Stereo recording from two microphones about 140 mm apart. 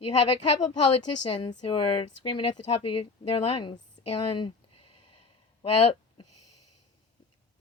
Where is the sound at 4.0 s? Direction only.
40° left (ahead or behind).